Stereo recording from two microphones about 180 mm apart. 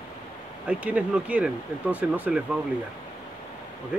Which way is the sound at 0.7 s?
5° right (ahead or behind).